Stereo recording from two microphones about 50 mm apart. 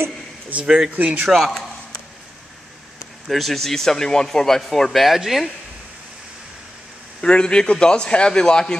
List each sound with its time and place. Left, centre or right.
0.7 s speech: centre
0.9 s speech: right
1.2 s speech: centre
3.3 s speech: centre
7.2 s speech: centre